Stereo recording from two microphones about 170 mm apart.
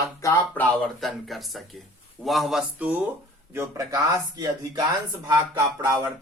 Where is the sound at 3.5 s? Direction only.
15° right (ahead or behind).